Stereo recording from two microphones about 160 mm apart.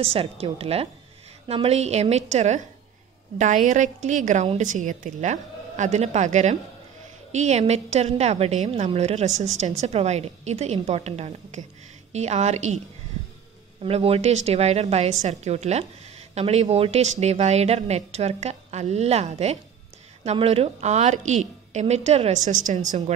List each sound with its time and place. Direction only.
0.0 s speech: 35° right (ahead or behind)
13.8 s speech: 40° right (ahead or behind)